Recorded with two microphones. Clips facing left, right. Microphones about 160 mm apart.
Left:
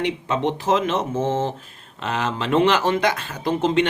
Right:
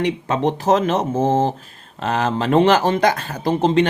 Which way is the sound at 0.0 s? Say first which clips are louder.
Right 3 dB; 40° right (ahead or behind).